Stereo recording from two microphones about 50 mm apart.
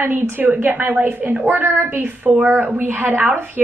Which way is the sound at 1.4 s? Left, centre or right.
Right.